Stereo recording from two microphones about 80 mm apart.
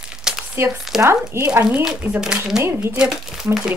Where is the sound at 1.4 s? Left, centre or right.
Right.